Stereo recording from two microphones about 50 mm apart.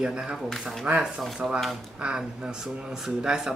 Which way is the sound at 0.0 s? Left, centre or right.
Centre.